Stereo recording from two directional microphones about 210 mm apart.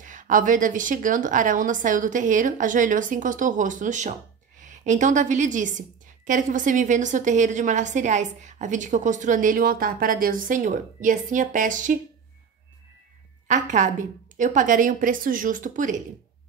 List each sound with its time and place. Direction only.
0.0 s a woman's voice: 40° right (ahead or behind)
13.5 s a woman's voice: 35° right (ahead or behind)